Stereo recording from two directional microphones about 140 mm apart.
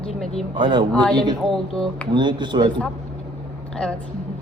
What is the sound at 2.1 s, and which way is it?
Speech, 35° right (ahead or behind).